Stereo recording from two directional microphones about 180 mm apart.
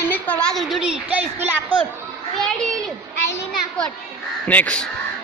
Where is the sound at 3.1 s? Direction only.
70° left (ahead or behind).